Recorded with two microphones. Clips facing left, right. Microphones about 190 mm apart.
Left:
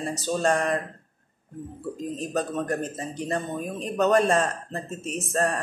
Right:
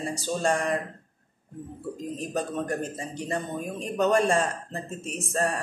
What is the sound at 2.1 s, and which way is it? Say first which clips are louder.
Speech: left 2 dB; 15° right (ahead or behind).